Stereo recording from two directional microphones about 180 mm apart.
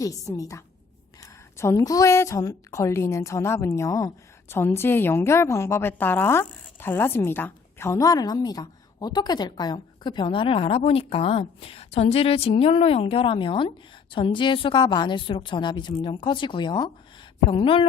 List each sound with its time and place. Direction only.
0.0 s a woman's voice: 20° left (ahead or behind)